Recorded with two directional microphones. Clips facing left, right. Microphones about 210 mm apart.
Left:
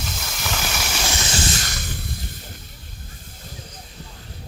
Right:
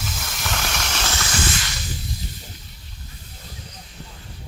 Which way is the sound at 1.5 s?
45° left (ahead or behind).